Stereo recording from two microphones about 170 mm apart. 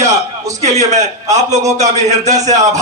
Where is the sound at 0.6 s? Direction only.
40° right (ahead or behind).